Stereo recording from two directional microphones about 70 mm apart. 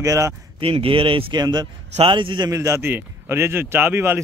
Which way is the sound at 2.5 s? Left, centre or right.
Right.